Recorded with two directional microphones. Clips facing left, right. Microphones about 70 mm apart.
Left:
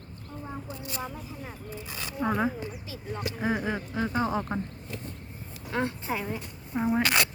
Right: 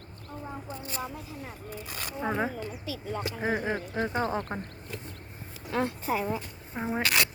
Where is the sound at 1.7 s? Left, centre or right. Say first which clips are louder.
Right 1 dB; right.